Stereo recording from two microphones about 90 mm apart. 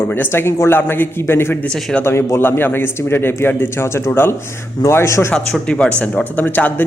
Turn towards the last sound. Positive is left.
turn(degrees=20)  # may be behind; listen again after turning